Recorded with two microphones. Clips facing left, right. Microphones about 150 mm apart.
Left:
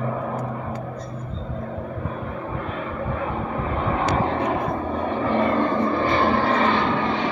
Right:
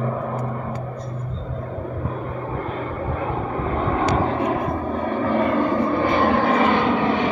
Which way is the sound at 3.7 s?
Centre (ahead or behind).